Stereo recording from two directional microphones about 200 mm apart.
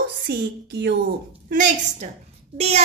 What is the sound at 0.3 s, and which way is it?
Speech, 55° right (ahead or behind).